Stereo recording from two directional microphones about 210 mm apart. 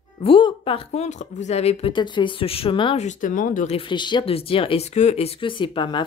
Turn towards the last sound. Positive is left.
turn(degrees=25)  # may be behind; listen again after turning